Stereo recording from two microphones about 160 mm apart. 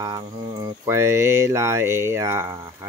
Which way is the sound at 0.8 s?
15° right (ahead or behind).